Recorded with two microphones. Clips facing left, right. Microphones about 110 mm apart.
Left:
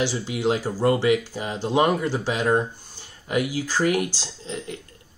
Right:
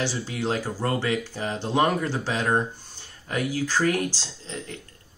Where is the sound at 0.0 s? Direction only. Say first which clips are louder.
Left 4 dB; 15° left (ahead or behind).